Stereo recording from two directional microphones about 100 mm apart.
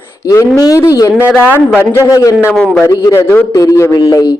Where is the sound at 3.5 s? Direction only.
35° left (ahead or behind).